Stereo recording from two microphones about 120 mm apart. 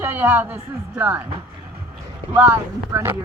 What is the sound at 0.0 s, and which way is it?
Speech, 15° right (ahead or behind).